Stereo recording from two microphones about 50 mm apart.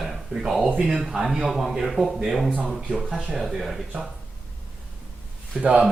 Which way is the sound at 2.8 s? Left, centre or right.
Centre.